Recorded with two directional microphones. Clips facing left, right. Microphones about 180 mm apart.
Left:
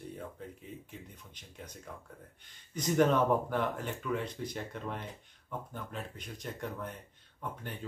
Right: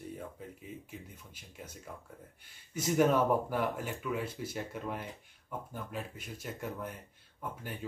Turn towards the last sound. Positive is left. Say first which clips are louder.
# even
turn(degrees=-5)  # may be behind; listen again after turning